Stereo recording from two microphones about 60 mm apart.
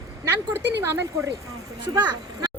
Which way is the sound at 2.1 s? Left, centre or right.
Right.